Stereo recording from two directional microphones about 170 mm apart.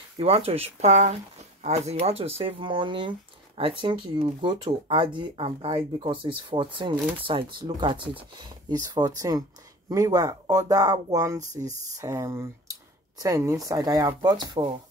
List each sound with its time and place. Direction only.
0.2 s speech: 35° right (ahead or behind)